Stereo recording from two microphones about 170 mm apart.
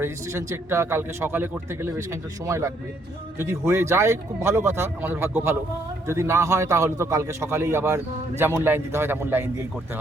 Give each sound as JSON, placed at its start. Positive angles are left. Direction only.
{"t": 0.0, "sound": "a man's voice", "side_deg": -15}